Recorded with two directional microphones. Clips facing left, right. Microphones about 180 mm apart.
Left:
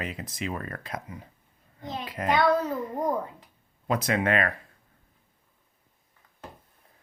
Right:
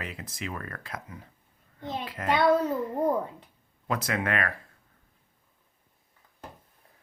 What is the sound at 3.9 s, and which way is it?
Speech, 20° left (ahead or behind).